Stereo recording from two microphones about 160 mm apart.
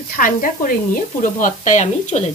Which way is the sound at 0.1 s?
60° left (ahead or behind).